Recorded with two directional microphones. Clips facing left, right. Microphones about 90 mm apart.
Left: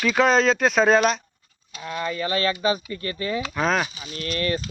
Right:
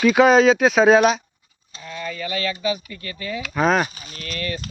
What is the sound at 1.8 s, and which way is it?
Speech, 40° left (ahead or behind).